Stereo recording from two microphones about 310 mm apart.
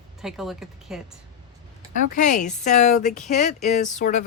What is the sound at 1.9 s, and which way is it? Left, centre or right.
Speech, left.